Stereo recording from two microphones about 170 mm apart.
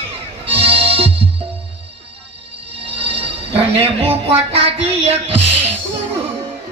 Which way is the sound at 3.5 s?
35° right (ahead or behind).